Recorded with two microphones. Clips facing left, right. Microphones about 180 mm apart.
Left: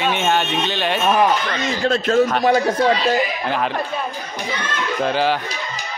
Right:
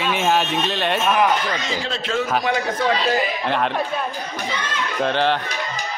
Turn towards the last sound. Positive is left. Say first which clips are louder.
# left 1 dB
turn(degrees=5)  # may be behind; listen again after turning